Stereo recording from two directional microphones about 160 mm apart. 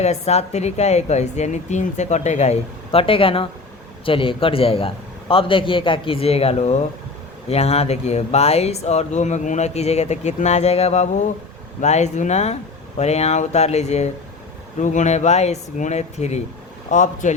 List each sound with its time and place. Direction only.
0.0 s speech: 45° left (ahead or behind)